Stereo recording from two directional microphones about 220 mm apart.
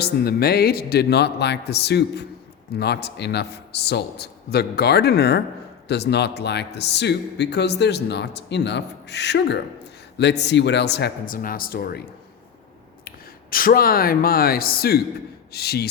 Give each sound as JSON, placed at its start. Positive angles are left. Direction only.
{"t": 0.0, "sound": "speech", "side_deg": 45}
{"t": 13.1, "sound": "speech", "side_deg": 40}